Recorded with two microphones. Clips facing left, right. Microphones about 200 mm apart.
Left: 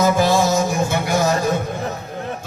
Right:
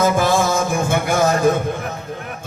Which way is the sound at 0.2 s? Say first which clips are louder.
Left 1 dB; 50° right (ahead or behind).